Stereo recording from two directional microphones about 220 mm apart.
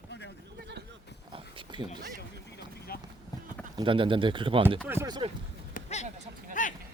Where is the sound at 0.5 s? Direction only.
50° right (ahead or behind).